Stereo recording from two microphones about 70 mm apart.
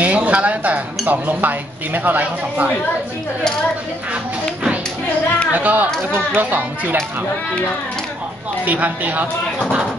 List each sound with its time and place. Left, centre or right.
0.0 s speech: right
5.5 s speech: right
8.6 s speech: right